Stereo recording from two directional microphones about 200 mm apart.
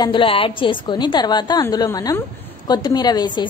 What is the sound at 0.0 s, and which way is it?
A woman's voice, 25° left (ahead or behind).